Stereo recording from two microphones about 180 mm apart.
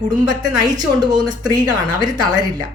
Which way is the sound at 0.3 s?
20° right (ahead or behind).